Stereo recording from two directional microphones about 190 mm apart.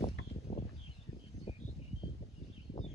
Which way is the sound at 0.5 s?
30° left (ahead or behind).